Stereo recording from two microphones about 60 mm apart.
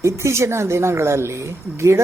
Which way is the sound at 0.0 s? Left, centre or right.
Right.